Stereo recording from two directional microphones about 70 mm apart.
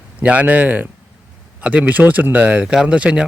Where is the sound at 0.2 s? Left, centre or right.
Right.